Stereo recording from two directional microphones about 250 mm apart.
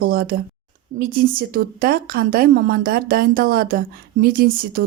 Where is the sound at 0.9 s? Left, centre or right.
Right.